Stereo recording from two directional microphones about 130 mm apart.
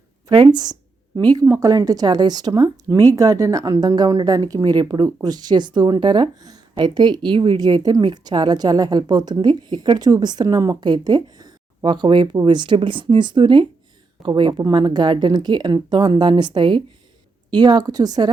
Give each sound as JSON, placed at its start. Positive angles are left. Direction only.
{"t": 0.3, "sound": "a woman's voice", "side_deg": -35}